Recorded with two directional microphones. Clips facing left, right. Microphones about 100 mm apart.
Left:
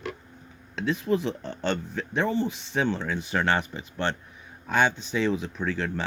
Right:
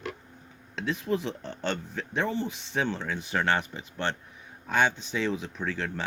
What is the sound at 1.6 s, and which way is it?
Speech, 15° left (ahead or behind).